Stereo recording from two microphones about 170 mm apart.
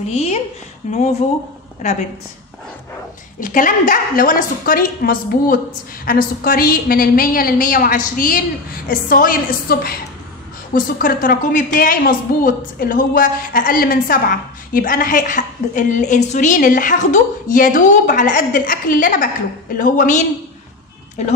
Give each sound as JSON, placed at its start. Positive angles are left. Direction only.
{"t": 0.0, "sound": "a woman's voice", "side_deg": 40}
{"t": 3.3, "sound": "a woman's voice", "side_deg": 50}